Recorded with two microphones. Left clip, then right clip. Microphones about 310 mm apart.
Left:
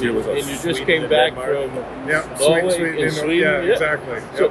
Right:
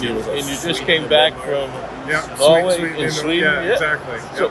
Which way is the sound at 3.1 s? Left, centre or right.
Centre.